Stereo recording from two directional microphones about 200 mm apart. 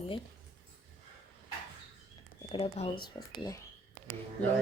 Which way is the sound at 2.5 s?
25° left (ahead or behind).